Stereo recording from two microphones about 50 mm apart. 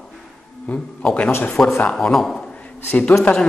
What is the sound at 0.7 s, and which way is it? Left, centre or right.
Speech, left.